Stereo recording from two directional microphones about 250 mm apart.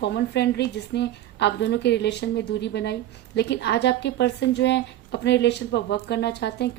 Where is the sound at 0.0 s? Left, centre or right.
Left.